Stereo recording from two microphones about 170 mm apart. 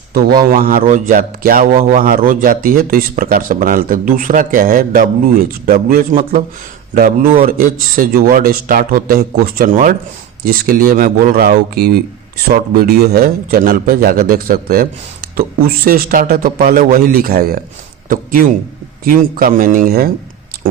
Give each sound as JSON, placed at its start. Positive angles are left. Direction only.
{"t": 0.1, "sound": "a man's voice", "side_deg": -60}